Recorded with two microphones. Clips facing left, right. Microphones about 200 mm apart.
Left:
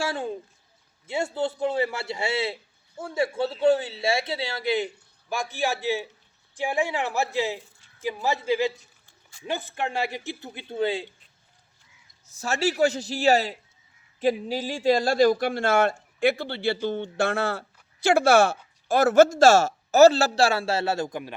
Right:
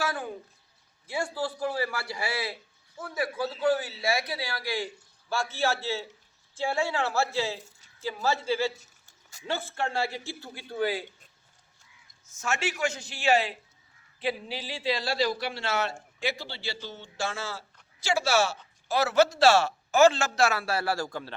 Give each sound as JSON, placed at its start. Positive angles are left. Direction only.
{"t": 0.0, "sound": "a sound", "side_deg": 25}
{"t": 1.0, "sound": "a man's voice", "side_deg": 25}
{"t": 12.3, "sound": "a man's voice", "side_deg": 35}